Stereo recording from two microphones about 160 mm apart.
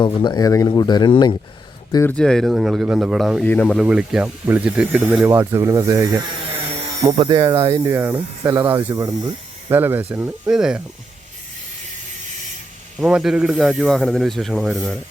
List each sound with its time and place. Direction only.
0.0 s speech: 30° left (ahead or behind)
1.9 s speech: 20° left (ahead or behind)
2.1 s a man's voice: 5° left (ahead or behind)
3.4 s speech: 10° left (ahead or behind)
3.8 s speech: 5° right (ahead or behind)
13.0 s a man's voice: 5° right (ahead or behind)